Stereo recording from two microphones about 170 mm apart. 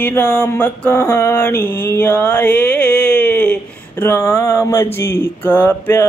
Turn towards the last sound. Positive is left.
turn(degrees=10)  # may be behind; listen again after turning